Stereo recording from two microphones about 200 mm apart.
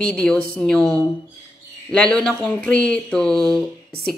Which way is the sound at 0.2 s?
5° left (ahead or behind).